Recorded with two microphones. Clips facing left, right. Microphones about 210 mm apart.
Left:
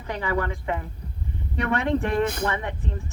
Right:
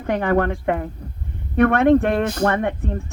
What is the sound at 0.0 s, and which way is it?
A woman's voice, 55° right (ahead or behind).